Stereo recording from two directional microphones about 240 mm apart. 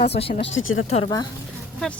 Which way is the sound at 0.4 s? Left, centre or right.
Left.